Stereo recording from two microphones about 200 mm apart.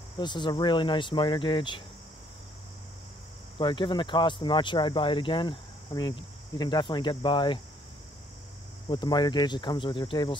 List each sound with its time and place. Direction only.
0.2 s speech: 20° left (ahead or behind)
3.5 s speech: 25° left (ahead or behind)
8.8 s speech: 20° left (ahead or behind)